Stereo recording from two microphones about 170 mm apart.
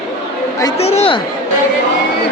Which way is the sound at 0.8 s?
35° left (ahead or behind).